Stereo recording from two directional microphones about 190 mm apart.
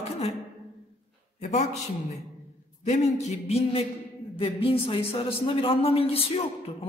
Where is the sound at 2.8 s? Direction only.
35° left (ahead or behind).